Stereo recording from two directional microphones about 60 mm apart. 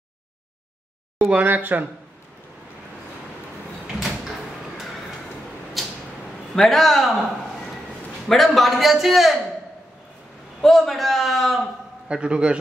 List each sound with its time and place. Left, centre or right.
1.3 s speech: right
5.8 s a sound: centre
6.5 s a man's voice: centre
8.3 s a man's voice: centre
10.6 s a man's voice: centre
12.1 s a man's voice: centre